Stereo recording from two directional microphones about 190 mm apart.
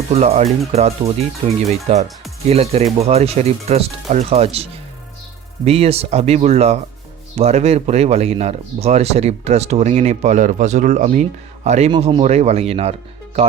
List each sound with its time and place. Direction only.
0.1 s speech: 35° right (ahead or behind)